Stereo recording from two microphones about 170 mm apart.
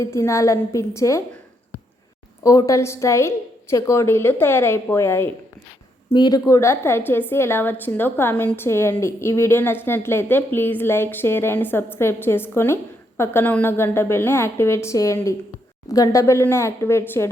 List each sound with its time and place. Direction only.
0.0 s speech: 15° left (ahead or behind)
2.4 s speech: 20° left (ahead or behind)